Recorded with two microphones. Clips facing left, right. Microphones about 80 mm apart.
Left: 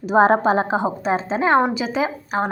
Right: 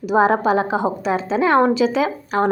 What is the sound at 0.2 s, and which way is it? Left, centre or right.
A woman's voice, left.